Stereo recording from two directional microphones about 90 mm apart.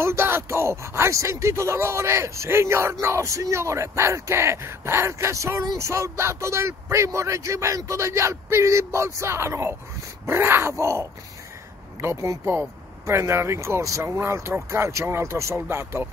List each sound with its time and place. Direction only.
0.0 s speech: 25° right (ahead or behind)